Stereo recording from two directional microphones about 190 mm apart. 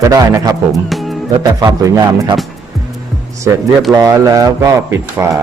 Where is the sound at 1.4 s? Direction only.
20° right (ahead or behind).